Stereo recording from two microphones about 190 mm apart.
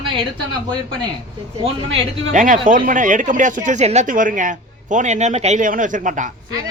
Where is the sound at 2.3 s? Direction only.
40° right (ahead or behind).